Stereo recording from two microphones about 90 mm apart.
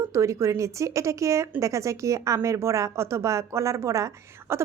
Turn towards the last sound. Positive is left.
turn(degrees=-30)  # may be behind; listen again after turning